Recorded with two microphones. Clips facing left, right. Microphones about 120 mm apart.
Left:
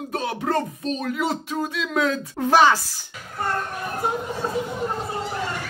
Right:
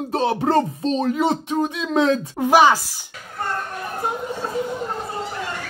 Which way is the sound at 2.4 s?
15° right (ahead or behind).